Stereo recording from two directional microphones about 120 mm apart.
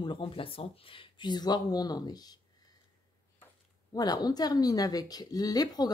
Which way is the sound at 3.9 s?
35° left (ahead or behind).